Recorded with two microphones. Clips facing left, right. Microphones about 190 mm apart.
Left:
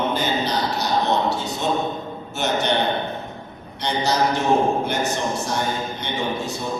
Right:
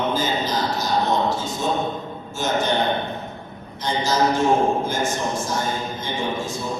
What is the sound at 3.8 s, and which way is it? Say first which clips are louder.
A man's voice: even; 65° left (ahead or behind).